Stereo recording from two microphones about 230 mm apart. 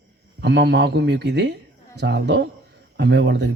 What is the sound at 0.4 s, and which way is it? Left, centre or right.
Speech, right.